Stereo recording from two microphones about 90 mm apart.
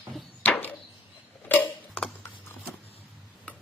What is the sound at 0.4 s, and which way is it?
Chop, 15° left (ahead or behind).